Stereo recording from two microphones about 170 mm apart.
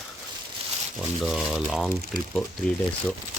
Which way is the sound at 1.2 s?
Centre (ahead or behind).